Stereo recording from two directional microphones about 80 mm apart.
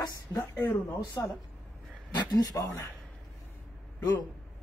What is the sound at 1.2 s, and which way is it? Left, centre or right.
Speech, left.